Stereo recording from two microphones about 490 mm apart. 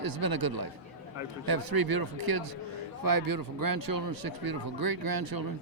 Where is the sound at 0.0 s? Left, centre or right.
Right.